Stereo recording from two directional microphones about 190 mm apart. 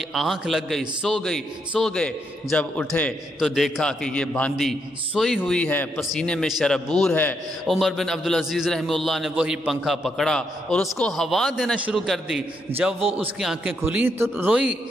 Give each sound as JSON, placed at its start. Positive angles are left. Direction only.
{"t": 0.1, "sound": "a man's voice", "side_deg": 0}